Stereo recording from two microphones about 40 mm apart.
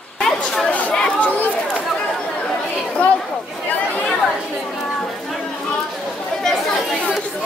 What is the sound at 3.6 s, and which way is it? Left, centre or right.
Chatter, left.